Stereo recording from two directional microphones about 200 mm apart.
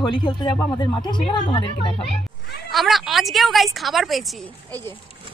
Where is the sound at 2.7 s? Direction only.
Centre (ahead or behind).